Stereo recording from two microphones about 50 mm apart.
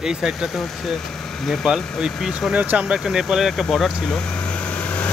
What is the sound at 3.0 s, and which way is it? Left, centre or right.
Speech, centre.